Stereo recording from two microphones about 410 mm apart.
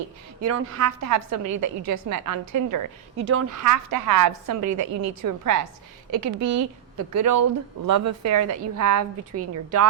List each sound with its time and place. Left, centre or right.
0.4 s a woman's voice: right